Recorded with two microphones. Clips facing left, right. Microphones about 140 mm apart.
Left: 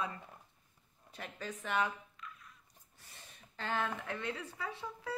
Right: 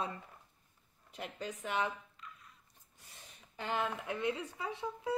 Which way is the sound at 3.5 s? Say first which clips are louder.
Right 1 dB; 15° right (ahead or behind).